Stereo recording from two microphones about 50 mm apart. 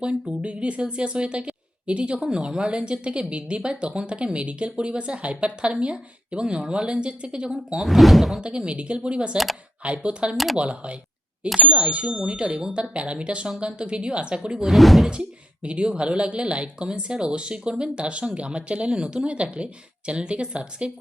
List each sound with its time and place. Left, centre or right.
0.0 s speech: right
7.8 s speech: centre
8.4 s speech: right
10.3 s speech: centre
10.6 s speech: right
14.6 s speech: centre
15.6 s speech: right